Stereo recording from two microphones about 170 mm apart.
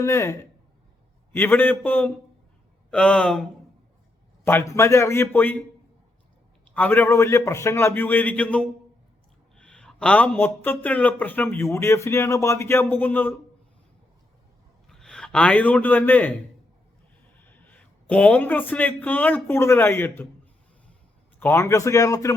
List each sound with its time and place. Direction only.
0.0 s a man's voice: 15° left (ahead or behind)
4.4 s a man's voice: 15° left (ahead or behind)
6.7 s a man's voice: 10° left (ahead or behind)
14.8 s a man's voice: 5° left (ahead or behind)
17.3 s speech: 10° left (ahead or behind)
21.3 s a man's voice: 15° left (ahead or behind)